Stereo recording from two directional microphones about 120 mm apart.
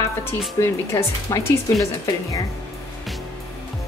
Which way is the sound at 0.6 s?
25° left (ahead or behind).